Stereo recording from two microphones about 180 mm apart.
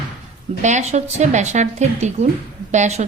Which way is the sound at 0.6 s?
40° right (ahead or behind).